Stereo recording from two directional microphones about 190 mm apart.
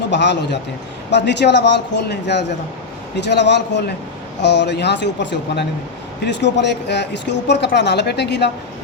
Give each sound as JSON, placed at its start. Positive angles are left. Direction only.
{"t": 0.1, "sound": "speech", "side_deg": 65}